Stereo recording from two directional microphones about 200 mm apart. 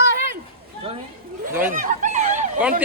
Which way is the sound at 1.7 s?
40° right (ahead or behind).